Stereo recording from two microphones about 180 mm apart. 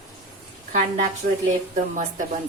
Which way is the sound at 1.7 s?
45° right (ahead or behind).